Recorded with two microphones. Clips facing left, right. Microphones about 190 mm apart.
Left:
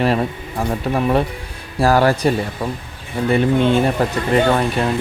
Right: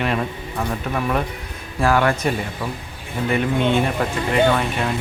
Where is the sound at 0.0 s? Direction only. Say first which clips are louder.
Left 5 dB; 35° left (ahead or behind).